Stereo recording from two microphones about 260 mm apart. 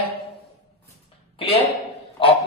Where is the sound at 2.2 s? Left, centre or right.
Centre.